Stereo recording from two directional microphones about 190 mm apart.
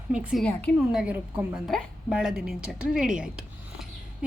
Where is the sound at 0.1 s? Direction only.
5° right (ahead or behind).